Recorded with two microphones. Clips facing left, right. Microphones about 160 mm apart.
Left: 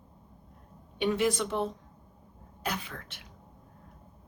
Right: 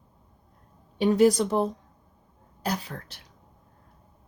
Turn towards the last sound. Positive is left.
turn(degrees=-35)  # may be behind; listen again after turning